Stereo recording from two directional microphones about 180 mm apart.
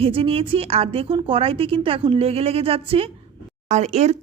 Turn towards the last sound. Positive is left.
turn(degrees=-40)  # may be behind; listen again after turning